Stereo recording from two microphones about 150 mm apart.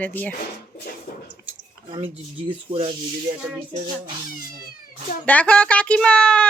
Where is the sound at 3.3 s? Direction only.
50° right (ahead or behind).